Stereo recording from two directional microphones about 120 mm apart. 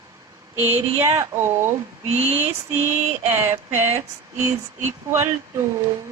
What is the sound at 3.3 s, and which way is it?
Speech, 20° right (ahead or behind).